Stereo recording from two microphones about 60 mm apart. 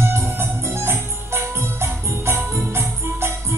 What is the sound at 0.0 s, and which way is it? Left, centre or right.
Music, right.